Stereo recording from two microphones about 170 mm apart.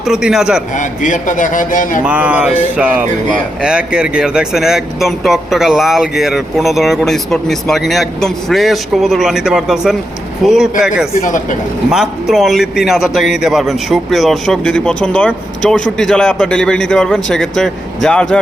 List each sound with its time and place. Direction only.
0.1 s a man's voice: 5° right (ahead or behind)
0.8 s a man's voice: 50° left (ahead or behind)
2.0 s music: 10° right (ahead or behind)
3.6 s a man's voice: 5° right (ahead or behind)